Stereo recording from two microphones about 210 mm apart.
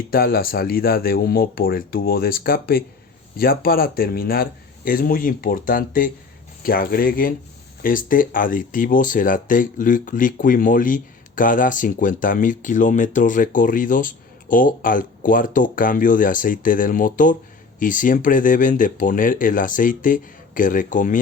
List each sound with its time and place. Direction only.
0.1 s speech: 45° left (ahead or behind)